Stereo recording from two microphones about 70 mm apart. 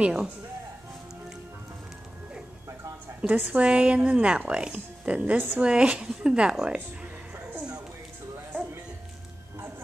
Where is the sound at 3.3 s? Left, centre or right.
Right.